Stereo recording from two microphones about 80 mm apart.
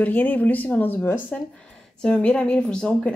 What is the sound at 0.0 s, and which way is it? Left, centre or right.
Speech, left.